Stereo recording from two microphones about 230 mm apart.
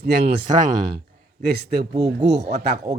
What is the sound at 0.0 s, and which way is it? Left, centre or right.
Speech, right.